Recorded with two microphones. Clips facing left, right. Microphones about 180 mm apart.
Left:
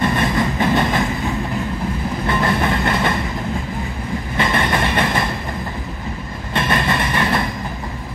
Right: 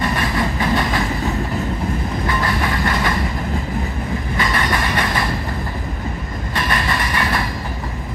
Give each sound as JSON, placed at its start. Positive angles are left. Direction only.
{"t": 0.2, "sound": "train", "side_deg": 25}
{"t": 2.2, "sound": "vehicle", "side_deg": 25}
{"t": 4.4, "sound": "train", "side_deg": 25}
{"t": 6.5, "sound": "train", "side_deg": 25}